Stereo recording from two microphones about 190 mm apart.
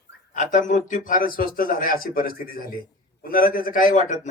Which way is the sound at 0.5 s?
40° left (ahead or behind).